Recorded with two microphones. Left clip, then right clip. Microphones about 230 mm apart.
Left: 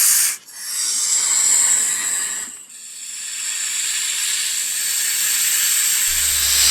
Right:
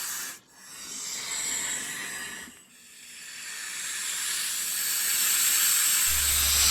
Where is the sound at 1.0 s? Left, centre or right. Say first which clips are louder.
Left 12 dB; left.